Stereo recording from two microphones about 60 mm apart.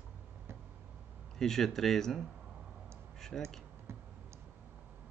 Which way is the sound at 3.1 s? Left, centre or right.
Centre.